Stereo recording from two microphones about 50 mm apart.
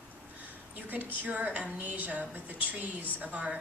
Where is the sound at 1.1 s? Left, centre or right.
Right.